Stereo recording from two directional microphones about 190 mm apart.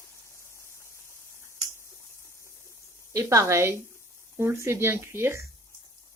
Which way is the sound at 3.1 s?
15° right (ahead or behind).